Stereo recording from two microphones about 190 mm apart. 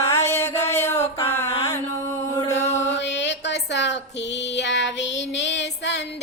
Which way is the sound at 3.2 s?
65° left (ahead or behind).